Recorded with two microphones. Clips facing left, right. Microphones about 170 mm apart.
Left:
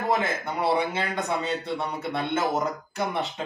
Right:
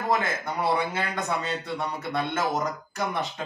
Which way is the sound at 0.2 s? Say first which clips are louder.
Left 1 dB; 20° left (ahead or behind).